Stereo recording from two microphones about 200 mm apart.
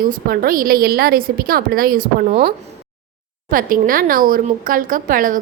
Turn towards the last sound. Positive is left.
turn(degrees=-45)  # may be behind; listen again after turning